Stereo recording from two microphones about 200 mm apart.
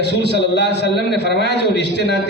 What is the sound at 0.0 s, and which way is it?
Speech, 55° left (ahead or behind).